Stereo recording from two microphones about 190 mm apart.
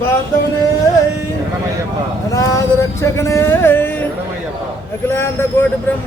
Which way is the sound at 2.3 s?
15° left (ahead or behind).